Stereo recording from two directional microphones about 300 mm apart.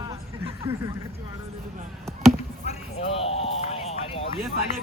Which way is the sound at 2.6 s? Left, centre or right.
Centre.